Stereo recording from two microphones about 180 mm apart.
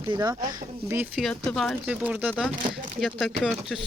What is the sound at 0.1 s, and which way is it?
Speech, 25° right (ahead or behind).